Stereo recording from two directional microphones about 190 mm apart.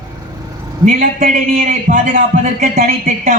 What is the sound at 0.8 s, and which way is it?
A man's voice, 45° right (ahead or behind).